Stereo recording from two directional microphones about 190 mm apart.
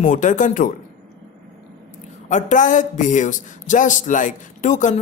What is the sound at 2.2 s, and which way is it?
Speech, 40° left (ahead or behind).